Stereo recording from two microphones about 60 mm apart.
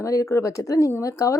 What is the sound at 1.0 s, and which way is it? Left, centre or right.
Speech, left.